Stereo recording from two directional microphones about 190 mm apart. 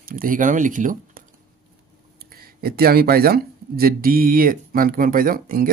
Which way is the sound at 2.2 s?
50° right (ahead or behind).